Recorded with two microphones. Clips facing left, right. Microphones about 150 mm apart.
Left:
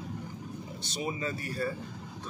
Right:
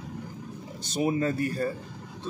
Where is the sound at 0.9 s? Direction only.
55° right (ahead or behind).